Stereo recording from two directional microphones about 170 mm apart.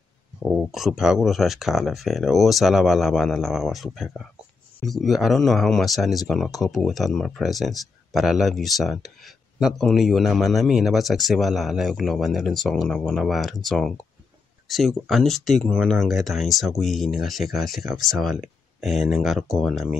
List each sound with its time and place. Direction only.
0.4 s speech: centre (ahead or behind)